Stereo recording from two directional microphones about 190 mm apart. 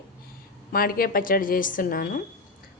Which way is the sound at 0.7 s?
50° left (ahead or behind).